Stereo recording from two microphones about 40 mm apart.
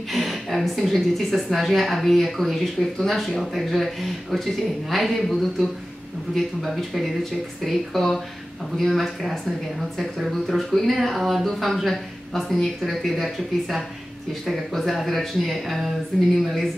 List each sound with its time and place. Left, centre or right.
0.1 s a woman's voice: centre